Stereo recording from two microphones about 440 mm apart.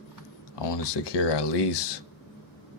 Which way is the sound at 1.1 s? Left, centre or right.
Left.